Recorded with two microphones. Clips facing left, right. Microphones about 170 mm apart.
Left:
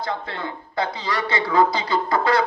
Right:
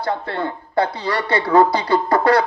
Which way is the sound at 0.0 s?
65° right (ahead or behind).